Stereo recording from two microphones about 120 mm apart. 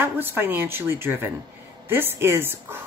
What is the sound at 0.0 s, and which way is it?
Speech, 15° right (ahead or behind).